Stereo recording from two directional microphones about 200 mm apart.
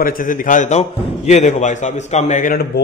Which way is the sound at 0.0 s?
40° left (ahead or behind).